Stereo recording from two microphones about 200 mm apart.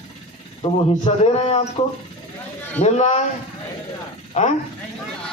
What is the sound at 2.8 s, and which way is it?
Speech, 35° left (ahead or behind).